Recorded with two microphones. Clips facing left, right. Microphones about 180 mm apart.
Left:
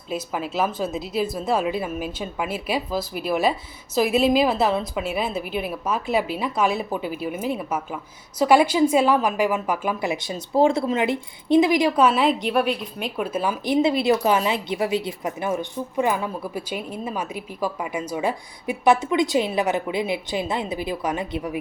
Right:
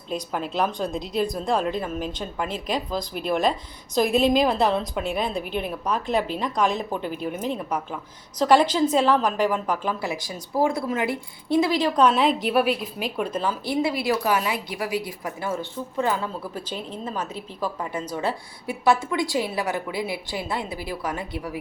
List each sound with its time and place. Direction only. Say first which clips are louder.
0.1 s a woman's voice: left 1 dB; 5° left (ahead or behind); by 21.6 s 20° left (ahead or behind)